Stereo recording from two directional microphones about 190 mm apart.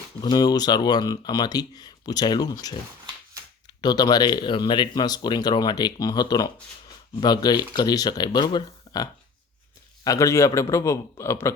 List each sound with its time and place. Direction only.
0.2 s speech: 20° left (ahead or behind)
3.8 s a man's voice: 20° left (ahead or behind)